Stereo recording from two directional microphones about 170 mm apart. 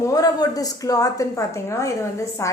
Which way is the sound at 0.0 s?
20° left (ahead or behind).